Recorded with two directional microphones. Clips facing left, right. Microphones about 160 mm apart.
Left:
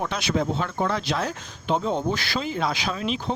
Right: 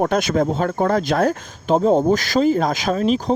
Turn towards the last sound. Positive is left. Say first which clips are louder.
# right 9 dB
turn(degrees=-40)  # may be behind; listen again after turning